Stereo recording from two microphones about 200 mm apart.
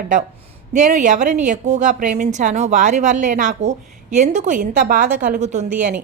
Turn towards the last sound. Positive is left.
turn(degrees=-40)  # may be behind; listen again after turning